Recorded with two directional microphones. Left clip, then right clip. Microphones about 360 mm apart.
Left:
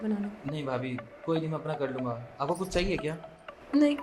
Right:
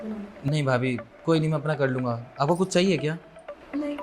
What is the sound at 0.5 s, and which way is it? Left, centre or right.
Speech, right.